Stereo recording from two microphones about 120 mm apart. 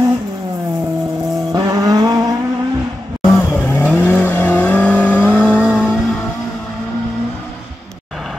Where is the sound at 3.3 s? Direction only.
20° left (ahead or behind).